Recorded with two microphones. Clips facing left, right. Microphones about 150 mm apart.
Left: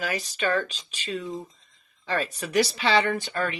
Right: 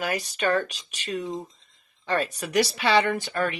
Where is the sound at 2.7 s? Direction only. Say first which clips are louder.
Right 1 dB; 50° right (ahead or behind).